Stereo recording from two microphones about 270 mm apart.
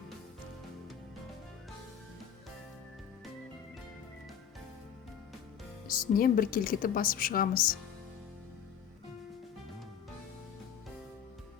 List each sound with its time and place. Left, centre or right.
5.9 s a woman's voice: left